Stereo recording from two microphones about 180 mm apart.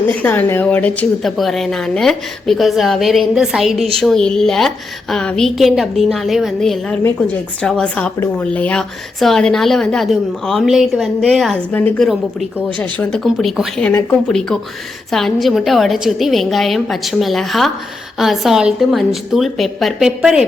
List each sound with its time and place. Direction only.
0.2 s a woman's voice: 10° left (ahead or behind)
11.7 s a woman's voice: 10° left (ahead or behind)